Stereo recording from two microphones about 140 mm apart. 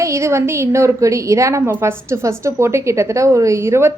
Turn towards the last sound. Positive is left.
turn(degrees=-20)  # may be behind; listen again after turning